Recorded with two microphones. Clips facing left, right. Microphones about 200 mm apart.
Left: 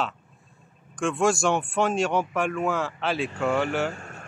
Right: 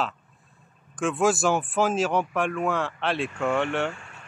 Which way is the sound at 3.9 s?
45° left (ahead or behind).